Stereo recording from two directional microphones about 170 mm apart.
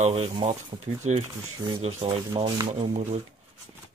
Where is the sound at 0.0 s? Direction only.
35° right (ahead or behind).